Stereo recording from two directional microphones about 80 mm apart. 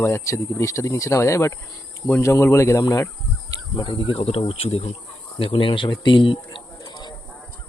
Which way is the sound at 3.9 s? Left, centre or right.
Left.